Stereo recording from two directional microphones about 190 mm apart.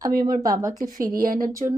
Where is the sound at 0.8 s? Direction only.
45° right (ahead or behind).